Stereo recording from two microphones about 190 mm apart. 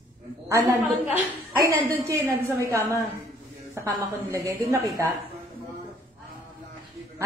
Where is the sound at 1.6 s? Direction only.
15° right (ahead or behind).